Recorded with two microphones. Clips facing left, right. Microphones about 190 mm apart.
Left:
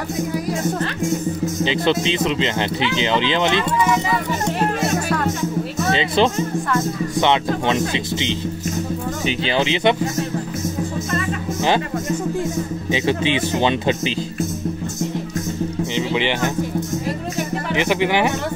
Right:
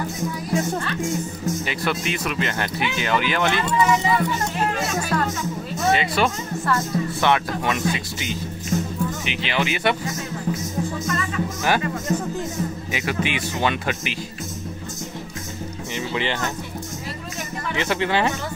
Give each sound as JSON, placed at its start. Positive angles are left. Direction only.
{"t": 1.6, "sound": "speech", "side_deg": 25}
{"t": 5.9, "sound": "speech", "side_deg": 25}
{"t": 12.9, "sound": "speech", "side_deg": 25}
{"t": 15.9, "sound": "speech", "side_deg": 20}
{"t": 17.7, "sound": "speech", "side_deg": 15}